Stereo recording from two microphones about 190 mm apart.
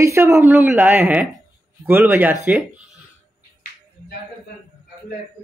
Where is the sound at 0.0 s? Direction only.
15° right (ahead or behind).